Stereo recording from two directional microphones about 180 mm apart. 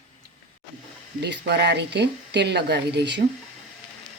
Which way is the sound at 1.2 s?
65° right (ahead or behind).